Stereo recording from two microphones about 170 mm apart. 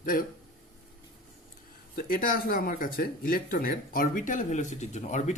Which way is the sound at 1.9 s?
55° left (ahead or behind).